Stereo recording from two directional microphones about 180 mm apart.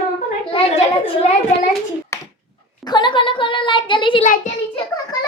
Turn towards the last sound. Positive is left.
turn(degrees=25)  # may be behind; listen again after turning